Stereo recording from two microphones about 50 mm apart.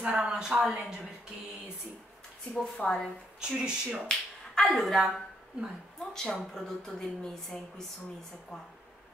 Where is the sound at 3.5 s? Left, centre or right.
Centre.